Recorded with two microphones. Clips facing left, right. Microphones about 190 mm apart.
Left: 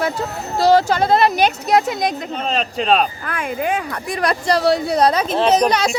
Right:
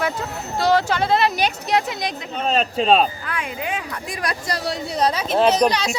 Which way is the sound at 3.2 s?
50° left (ahead or behind).